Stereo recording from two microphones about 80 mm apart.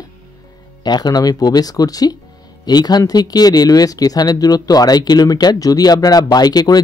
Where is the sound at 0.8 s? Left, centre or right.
Left.